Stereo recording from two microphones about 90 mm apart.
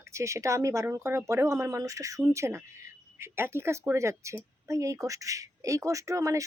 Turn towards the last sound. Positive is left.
turn(degrees=-40)  # may be behind; listen again after turning